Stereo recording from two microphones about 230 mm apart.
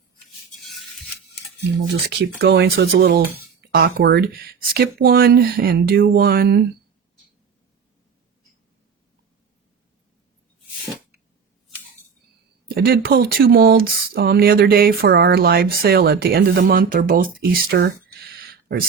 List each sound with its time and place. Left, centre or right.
0.6 s a sound: centre
2.0 s speech: right
12.6 s speech: right